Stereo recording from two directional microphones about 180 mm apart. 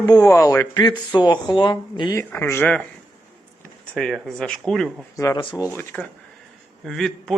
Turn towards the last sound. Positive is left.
turn(degrees=0)  # may be behind; listen again after turning